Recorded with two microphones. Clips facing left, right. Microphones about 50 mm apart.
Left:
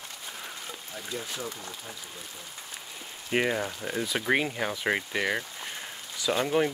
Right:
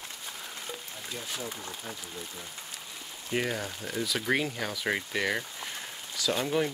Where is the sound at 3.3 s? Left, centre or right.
Left.